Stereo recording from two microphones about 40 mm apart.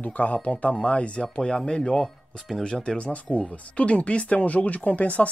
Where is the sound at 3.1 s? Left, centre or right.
Left.